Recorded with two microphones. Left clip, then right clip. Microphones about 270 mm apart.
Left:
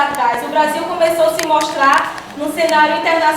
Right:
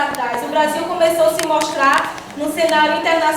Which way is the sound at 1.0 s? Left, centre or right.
Centre.